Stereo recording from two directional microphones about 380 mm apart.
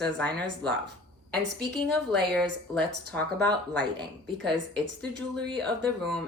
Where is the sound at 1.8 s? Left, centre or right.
Centre.